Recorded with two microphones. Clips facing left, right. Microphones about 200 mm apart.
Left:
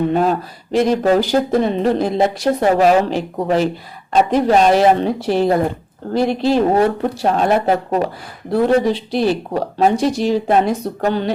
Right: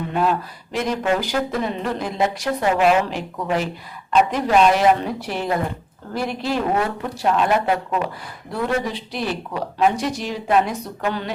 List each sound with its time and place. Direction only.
0.1 s speech: 40° left (ahead or behind)